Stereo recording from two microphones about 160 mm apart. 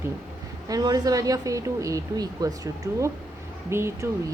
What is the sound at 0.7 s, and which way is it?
A woman's voice, 25° right (ahead or behind).